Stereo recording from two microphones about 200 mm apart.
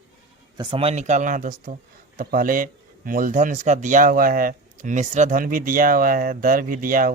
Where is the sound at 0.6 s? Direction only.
25° right (ahead or behind).